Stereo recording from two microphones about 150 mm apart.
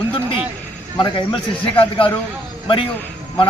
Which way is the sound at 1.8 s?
35° left (ahead or behind).